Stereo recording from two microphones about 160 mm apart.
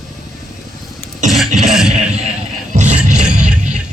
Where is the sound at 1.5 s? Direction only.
Centre (ahead or behind).